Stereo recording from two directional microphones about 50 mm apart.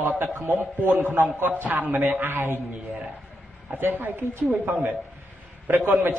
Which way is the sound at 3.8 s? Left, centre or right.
Right.